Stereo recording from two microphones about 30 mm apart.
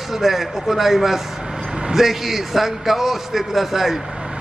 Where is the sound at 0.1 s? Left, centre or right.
Centre.